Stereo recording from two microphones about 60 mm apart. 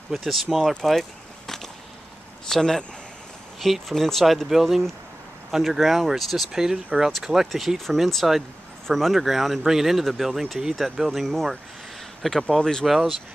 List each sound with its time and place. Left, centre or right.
0.1 s speech: centre
2.5 s speech: centre
12.8 s speech: centre